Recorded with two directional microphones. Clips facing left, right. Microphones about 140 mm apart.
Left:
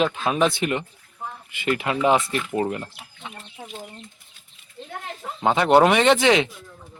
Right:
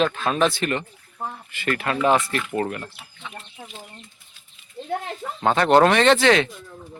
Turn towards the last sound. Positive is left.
turn(degrees=15)  # may be behind; listen again after turning